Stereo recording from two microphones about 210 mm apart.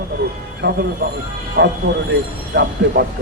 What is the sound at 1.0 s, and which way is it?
A man's voice, 45° right (ahead or behind).